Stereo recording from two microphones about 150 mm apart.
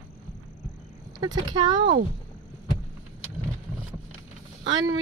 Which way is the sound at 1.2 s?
25° right (ahead or behind).